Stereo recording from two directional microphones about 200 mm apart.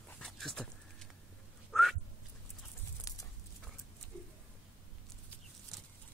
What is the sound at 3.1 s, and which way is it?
Horse, 15° left (ahead or behind).